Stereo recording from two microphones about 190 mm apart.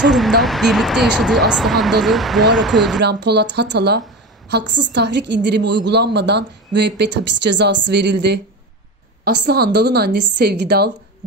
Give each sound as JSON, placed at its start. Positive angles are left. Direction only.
{"t": 0.0, "sound": "speech", "side_deg": 0}
{"t": 3.0, "sound": "a woman's voice", "side_deg": -65}